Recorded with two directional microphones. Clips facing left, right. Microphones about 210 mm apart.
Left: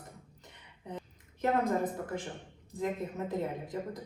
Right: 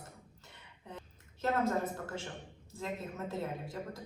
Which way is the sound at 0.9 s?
15° left (ahead or behind).